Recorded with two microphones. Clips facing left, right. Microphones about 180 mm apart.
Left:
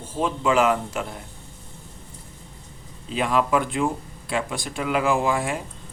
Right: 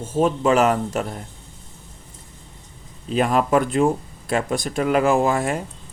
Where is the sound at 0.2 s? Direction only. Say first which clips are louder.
Right 4 dB; 40° right (ahead or behind).